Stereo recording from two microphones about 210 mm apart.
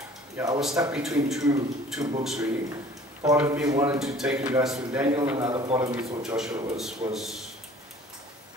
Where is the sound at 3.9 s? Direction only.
Centre (ahead or behind).